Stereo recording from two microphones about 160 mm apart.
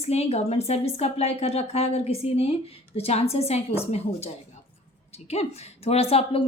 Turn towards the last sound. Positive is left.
turn(degrees=35)  # may be behind; listen again after turning